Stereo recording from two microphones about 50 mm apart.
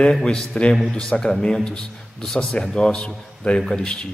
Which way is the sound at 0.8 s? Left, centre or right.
Centre.